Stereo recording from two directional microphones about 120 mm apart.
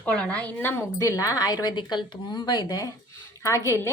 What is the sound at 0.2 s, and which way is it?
A woman's voice, 10° left (ahead or behind).